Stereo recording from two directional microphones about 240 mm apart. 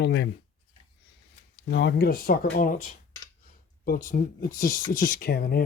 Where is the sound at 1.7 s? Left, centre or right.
Left.